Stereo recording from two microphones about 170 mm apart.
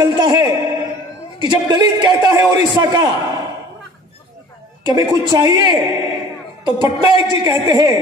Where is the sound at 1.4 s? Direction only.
25° right (ahead or behind).